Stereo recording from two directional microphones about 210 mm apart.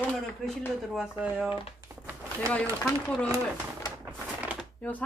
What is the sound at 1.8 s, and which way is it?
Crumpling, 15° right (ahead or behind).